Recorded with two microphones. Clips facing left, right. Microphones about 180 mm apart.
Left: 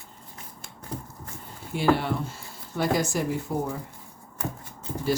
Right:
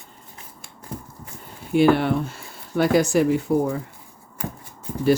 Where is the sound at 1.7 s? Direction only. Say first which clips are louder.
Right 7 dB; 65° right (ahead or behind).